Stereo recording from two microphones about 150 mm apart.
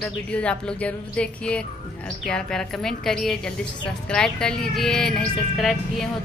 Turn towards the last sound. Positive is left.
turn(degrees=0)  # may be behind; listen again after turning